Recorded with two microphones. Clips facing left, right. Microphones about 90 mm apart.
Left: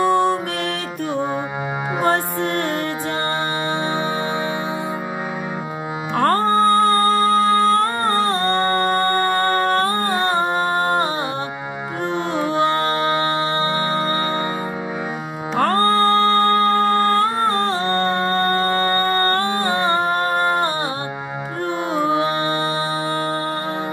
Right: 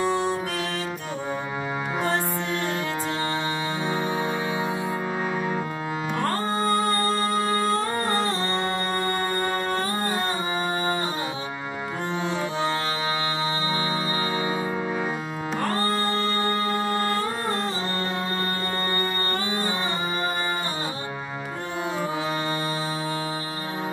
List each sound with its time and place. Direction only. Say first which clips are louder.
0.0 s music: left 7 dB; 55° left (ahead or behind)
6.1 s music: left 11 dB; 60° left (ahead or behind)
12.5 s music: left 8 dB; 55° left (ahead or behind)
15.6 s music: left 10 dB; 60° left (ahead or behind)
22.0 s music: left 9 dB; 60° left (ahead or behind)